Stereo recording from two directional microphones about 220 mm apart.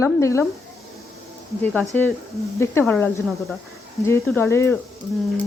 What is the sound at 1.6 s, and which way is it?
Speech, 5° left (ahead or behind).